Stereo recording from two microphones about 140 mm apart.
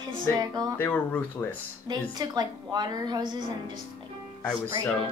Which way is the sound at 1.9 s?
30° right (ahead or behind).